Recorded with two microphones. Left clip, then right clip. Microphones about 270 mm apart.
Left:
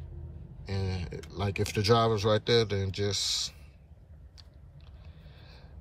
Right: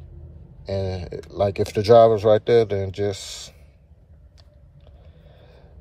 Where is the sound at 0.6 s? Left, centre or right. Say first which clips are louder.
Right 11 dB; centre.